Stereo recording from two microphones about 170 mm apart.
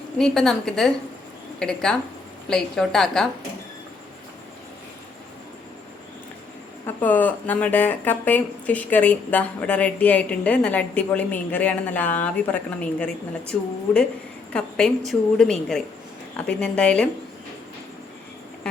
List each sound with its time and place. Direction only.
0.2 s a woman's voice: 5° left (ahead or behind)
6.8 s speech: 10° left (ahead or behind)
14.5 s a woman's voice: 5° left (ahead or behind)